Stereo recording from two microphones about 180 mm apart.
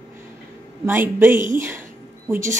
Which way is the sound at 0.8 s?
10° right (ahead or behind).